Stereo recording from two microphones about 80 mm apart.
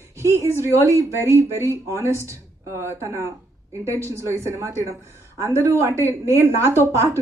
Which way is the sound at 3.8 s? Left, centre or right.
Right.